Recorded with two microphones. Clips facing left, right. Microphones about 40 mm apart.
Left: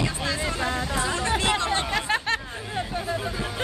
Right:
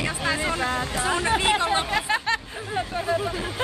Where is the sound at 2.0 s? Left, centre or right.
Centre.